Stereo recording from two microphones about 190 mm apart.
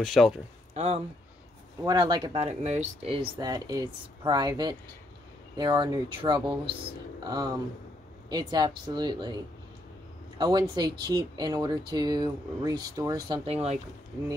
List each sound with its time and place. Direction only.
0.0 s speech: centre (ahead or behind)
0.7 s speech: 35° right (ahead or behind)
1.9 s speech: 20° right (ahead or behind)
10.4 s speech: 20° right (ahead or behind)
13.5 s speech: 35° right (ahead or behind)